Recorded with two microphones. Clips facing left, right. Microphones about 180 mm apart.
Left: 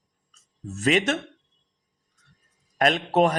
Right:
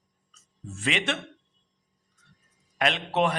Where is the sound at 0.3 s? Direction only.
40° left (ahead or behind).